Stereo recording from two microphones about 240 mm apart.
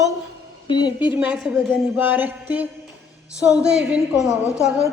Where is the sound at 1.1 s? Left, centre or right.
Centre.